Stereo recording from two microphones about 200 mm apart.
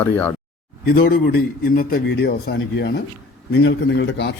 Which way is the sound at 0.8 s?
50° left (ahead or behind).